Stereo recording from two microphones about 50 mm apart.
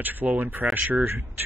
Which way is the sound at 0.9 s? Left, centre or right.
Right.